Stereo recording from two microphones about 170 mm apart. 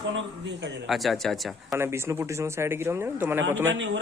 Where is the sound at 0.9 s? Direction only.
Centre (ahead or behind).